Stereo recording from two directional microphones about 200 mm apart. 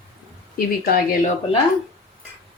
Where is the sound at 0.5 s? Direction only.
50° left (ahead or behind).